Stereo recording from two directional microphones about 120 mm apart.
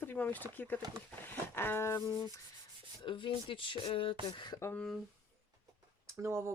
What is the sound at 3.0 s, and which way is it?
Speech, 45° left (ahead or behind).